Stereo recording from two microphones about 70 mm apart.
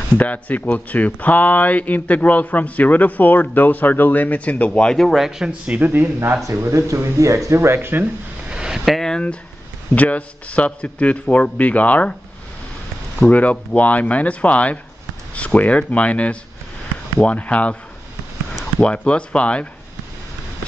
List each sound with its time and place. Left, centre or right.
0.2 s speech: left
4.8 s speech: centre
5.7 s speech: right
5.9 s speech: right
8.5 s a sound: centre
9.1 s speech: centre
13.3 s speech: left
17.4 s speech: centre
18.9 s speech: centre